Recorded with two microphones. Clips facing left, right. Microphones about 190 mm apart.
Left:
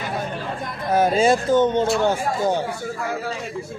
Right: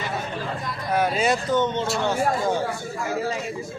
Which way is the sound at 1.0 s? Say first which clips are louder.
Left 6 dB; 30° left (ahead or behind).